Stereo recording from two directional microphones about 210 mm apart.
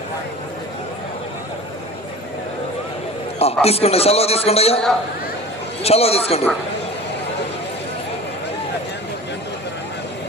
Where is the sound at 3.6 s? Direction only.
30° left (ahead or behind).